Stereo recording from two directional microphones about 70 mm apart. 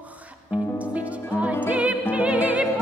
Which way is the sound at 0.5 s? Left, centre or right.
Centre.